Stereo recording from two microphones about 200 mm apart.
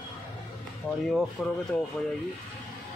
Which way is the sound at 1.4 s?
5° right (ahead or behind).